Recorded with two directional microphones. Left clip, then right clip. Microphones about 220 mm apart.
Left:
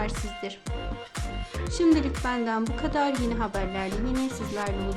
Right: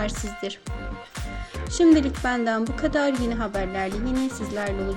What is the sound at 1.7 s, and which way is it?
A woman's voice, 15° right (ahead or behind).